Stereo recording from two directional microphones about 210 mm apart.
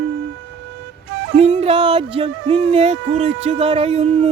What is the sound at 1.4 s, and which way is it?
Speech, 30° right (ahead or behind).